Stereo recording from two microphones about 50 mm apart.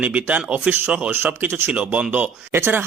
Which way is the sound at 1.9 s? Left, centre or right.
Right.